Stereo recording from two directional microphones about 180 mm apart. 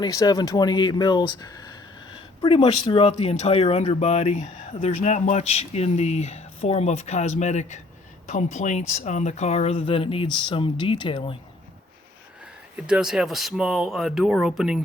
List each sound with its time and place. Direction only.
0.0 s speech: 20° left (ahead or behind)
12.7 s speech: 5° right (ahead or behind)